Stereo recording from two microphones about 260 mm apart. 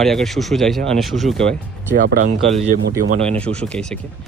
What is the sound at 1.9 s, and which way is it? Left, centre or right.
Speech, right.